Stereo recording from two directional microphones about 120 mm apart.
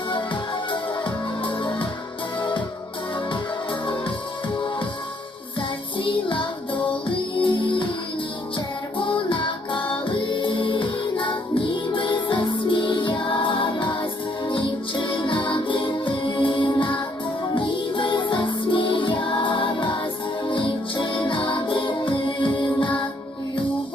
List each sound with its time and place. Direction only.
0.7 s music: 40° left (ahead or behind)
4.5 s music: 40° left (ahead or behind)